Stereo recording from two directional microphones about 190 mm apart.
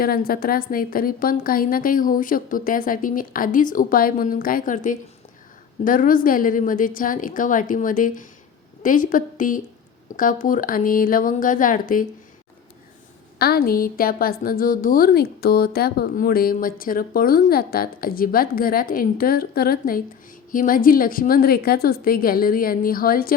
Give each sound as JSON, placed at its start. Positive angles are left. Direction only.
{"t": 0.0, "sound": "a woman's voice", "side_deg": 50}
{"t": 13.4, "sound": "a woman's voice", "side_deg": 55}